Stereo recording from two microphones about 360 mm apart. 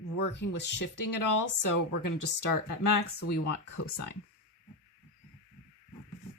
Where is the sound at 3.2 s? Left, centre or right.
Left.